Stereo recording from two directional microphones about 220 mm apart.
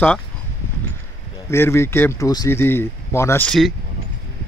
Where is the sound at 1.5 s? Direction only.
10° left (ahead or behind).